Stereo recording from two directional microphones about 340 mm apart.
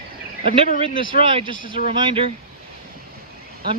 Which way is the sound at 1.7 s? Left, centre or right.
Centre.